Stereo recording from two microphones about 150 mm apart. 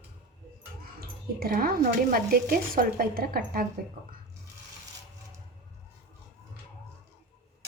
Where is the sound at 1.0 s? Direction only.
85° right.